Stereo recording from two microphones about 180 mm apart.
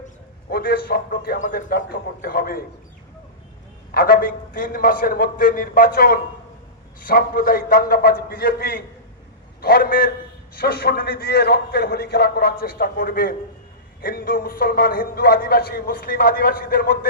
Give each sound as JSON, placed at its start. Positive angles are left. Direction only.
{"t": 0.5, "sound": "a man's voice", "side_deg": 60}
{"t": 3.9, "sound": "a man's voice", "side_deg": 55}